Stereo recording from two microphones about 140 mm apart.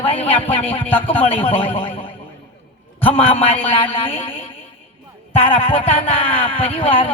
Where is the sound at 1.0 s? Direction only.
40° left (ahead or behind).